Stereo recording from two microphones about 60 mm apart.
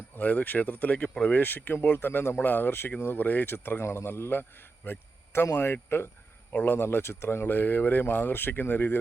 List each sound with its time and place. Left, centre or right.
0.2 s speech: left
4.9 s a sound: left
5.5 s speech: left
6.5 s speech: left
6.7 s speech: left